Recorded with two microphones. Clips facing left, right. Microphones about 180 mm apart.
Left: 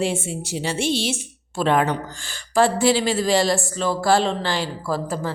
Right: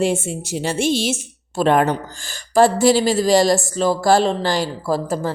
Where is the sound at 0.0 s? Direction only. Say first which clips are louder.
Right 4 dB; 45° right (ahead or behind).